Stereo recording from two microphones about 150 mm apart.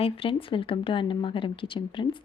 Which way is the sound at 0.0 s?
35° left (ahead or behind).